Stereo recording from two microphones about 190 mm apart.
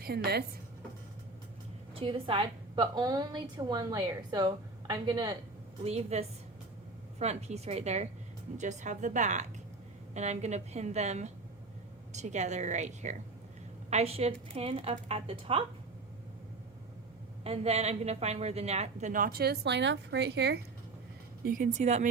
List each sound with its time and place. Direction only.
0.0 s a woman's voice: 55° right (ahead or behind)
2.0 s a woman's voice: 30° right (ahead or behind)
5.8 s a woman's voice: 35° right (ahead or behind)
17.4 s a woman's voice: 30° right (ahead or behind); by 20.6 s 60° right (ahead or behind)
21.4 s a woman's voice: 45° right (ahead or behind)